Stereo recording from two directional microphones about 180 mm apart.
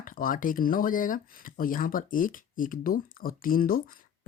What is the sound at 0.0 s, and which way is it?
Speech, 50° left (ahead or behind).